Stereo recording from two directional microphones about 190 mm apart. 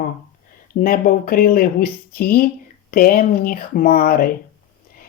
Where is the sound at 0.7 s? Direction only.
50° left (ahead or behind).